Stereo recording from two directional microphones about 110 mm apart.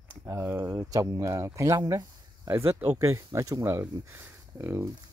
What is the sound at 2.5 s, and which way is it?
Speech, 20° right (ahead or behind).